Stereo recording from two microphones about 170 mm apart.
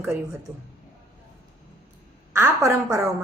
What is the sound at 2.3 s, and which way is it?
Speech, 15° right (ahead or behind).